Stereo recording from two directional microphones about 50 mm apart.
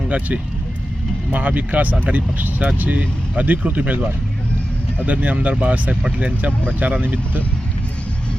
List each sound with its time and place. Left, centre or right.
1.3 s speech: right
5.0 s speech: right